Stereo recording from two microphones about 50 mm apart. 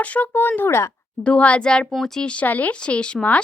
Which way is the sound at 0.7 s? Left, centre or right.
Left.